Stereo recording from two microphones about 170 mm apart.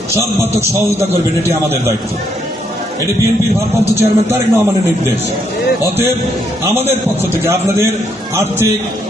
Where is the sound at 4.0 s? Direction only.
15° right (ahead or behind).